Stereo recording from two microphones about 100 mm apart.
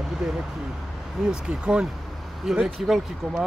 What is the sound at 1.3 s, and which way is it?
Speech, 10° right (ahead or behind).